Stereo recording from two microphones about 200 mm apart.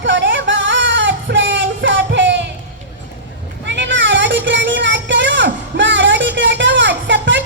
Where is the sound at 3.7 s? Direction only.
65° right (ahead or behind).